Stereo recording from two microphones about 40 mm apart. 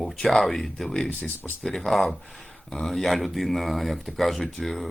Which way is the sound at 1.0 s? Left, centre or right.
Left.